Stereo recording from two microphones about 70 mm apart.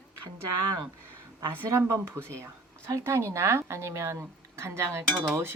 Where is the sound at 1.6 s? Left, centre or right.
Right.